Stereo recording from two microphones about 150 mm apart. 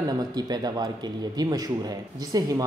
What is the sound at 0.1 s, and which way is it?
Speech, 25° right (ahead or behind).